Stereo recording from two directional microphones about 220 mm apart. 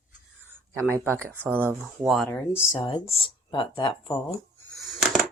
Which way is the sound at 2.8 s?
20° left (ahead or behind).